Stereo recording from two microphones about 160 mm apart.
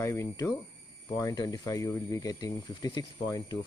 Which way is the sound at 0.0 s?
20° left (ahead or behind).